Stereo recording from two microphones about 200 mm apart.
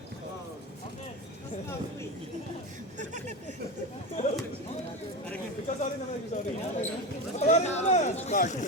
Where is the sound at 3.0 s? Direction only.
35° right (ahead or behind).